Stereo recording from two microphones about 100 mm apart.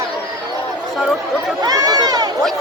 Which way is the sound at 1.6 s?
40° right (ahead or behind).